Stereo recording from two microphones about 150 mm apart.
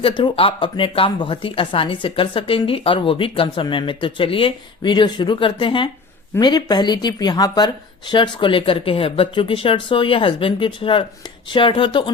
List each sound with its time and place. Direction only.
0.0 s speech: 30° left (ahead or behind)